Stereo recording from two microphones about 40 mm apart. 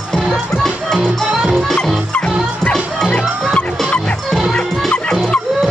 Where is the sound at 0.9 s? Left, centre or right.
Right.